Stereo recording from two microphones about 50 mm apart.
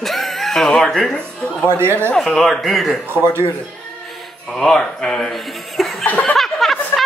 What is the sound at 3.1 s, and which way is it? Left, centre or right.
Speech, right.